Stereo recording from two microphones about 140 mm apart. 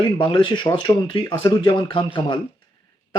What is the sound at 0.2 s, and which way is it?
Speech, 35° left (ahead or behind).